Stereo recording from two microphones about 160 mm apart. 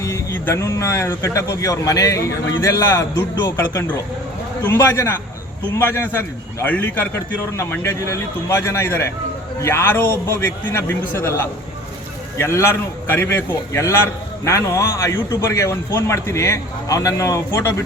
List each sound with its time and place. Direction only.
0.0 s a man's voice: 15° left (ahead or behind)
12.4 s a man's voice: 15° left (ahead or behind)